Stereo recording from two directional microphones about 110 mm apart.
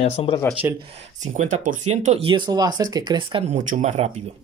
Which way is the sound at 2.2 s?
45° right (ahead or behind).